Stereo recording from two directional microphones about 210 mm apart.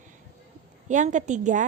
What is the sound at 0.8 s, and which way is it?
Speech, 35° right (ahead or behind).